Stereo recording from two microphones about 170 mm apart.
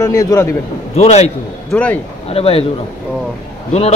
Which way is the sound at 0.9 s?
40° left (ahead or behind).